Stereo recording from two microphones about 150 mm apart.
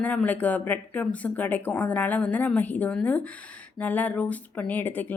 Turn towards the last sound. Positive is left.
turn(degrees=10)  # may be behind; listen again after turning